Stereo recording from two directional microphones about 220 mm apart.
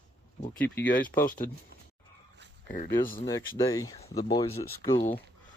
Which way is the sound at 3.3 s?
15° left (ahead or behind).